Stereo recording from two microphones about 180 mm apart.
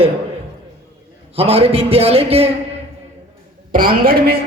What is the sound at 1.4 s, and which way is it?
A man's voice, 35° right (ahead or behind).